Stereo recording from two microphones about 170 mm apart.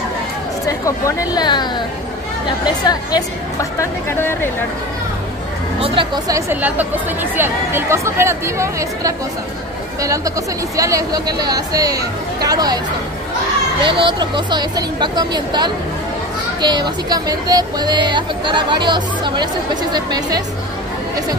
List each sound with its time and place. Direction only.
0.7 s a sound: 20° left (ahead or behind)
1.3 s a woman's voice: 25° left (ahead or behind)
5.8 s a woman's voice: 25° right (ahead or behind)
13.8 s a woman's voice: 30° right (ahead or behind)